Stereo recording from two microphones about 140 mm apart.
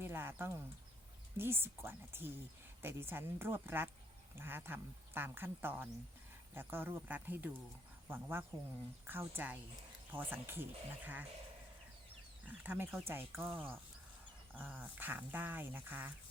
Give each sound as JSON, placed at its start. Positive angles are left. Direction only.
{"t": 0.0, "sound": "speech", "side_deg": -15}
{"t": 12.5, "sound": "speech", "side_deg": -10}